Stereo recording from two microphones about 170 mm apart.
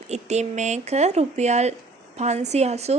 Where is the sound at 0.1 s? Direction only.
40° right (ahead or behind).